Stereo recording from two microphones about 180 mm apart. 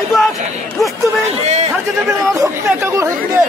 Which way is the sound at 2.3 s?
15° right (ahead or behind).